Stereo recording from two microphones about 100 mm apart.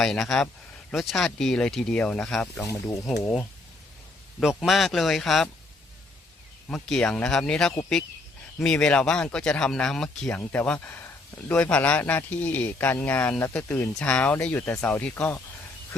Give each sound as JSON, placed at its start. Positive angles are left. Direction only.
{"t": 0.0, "sound": "speech", "side_deg": 5}
{"t": 4.4, "sound": "speech", "side_deg": -5}
{"t": 6.7, "sound": "speech", "side_deg": 5}